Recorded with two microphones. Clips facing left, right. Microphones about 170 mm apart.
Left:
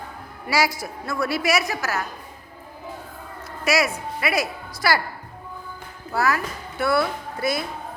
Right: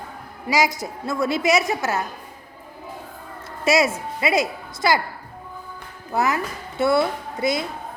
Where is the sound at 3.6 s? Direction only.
25° right (ahead or behind).